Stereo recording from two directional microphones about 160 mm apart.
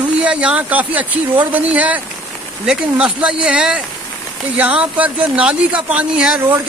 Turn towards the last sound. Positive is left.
turn(degrees=-10)  # may be behind; listen again after turning